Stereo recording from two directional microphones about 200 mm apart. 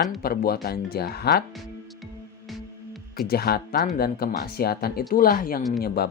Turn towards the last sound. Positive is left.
turn(degrees=55)  # may be behind; listen again after turning